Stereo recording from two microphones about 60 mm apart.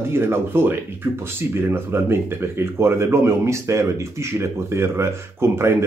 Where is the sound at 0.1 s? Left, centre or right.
Right.